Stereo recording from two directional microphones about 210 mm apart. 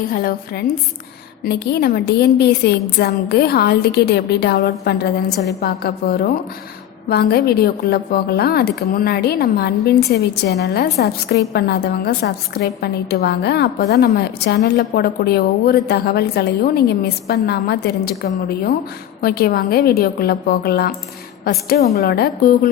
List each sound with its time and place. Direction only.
0.1 s speech: 45° left (ahead or behind)
21.9 s speech: 50° left (ahead or behind)